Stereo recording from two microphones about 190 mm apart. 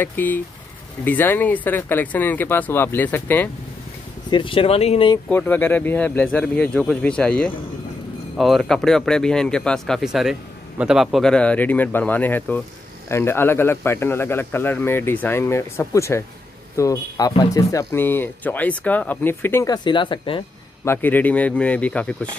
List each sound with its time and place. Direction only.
0.0 s speech: 10° left (ahead or behind)
4.3 s speech: 25° left (ahead or behind)
5.3 s speech: 10° left (ahead or behind); by 20.4 s 25° left (ahead or behind)
20.8 s speech: 10° left (ahead or behind)